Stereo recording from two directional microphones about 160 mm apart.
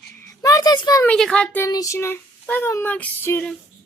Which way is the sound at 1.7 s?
20° left (ahead or behind).